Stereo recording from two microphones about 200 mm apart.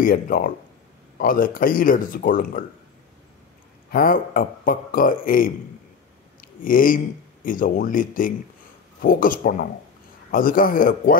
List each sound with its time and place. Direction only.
0.0 s speech: 45° left (ahead or behind)
3.9 s speech: 45° left (ahead or behind)
6.6 s speech: 45° left (ahead or behind)